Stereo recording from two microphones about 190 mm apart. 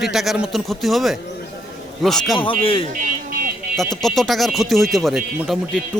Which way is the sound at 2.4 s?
30° left (ahead or behind).